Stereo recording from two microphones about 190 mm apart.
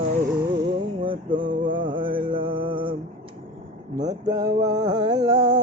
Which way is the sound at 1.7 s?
25° right (ahead or behind).